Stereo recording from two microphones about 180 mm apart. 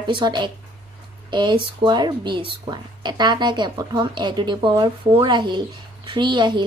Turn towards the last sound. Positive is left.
turn(degrees=-25)  # may be behind; listen again after turning